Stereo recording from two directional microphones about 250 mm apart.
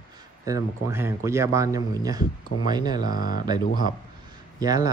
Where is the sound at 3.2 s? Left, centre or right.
Left.